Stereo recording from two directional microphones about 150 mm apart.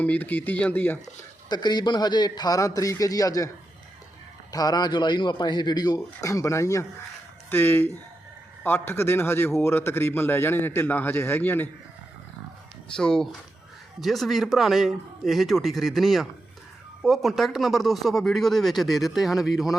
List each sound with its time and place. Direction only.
0.0 s a man's voice: 10° left (ahead or behind)
1.5 s a man's voice: 30° left (ahead or behind)
4.5 s a man's voice: 25° left (ahead or behind)
13.0 s speech: 5° left (ahead or behind)